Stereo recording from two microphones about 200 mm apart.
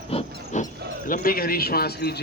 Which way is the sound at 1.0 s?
45° left (ahead or behind).